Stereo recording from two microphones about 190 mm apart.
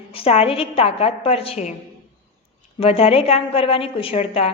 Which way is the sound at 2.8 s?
30° left (ahead or behind).